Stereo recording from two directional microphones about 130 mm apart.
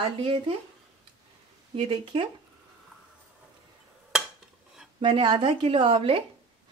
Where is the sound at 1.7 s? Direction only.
40° right (ahead or behind).